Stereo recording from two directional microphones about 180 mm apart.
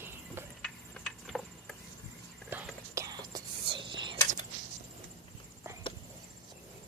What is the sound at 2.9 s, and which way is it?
Whispering, 20° right (ahead or behind).